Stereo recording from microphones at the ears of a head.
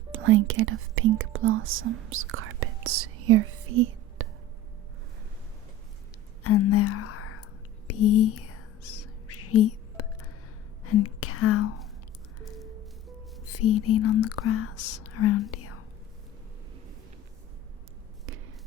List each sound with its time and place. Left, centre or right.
0.1 s speech: right
6.4 s speech: left
7.9 s whispering: left
10.8 s speech: left
13.4 s speech: left